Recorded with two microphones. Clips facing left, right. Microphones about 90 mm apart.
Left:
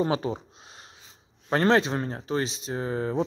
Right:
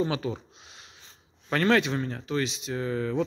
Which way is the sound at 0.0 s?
35° left (ahead or behind).